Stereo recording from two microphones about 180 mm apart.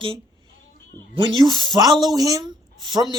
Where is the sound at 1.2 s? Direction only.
25° right (ahead or behind).